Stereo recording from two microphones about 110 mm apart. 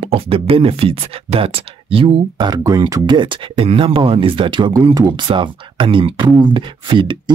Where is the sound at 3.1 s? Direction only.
50° right (ahead or behind).